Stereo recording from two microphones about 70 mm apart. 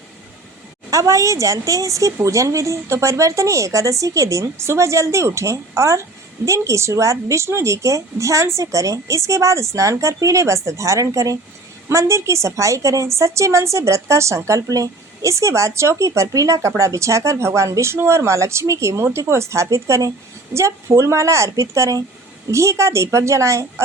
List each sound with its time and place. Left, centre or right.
0.9 s a woman's voice: right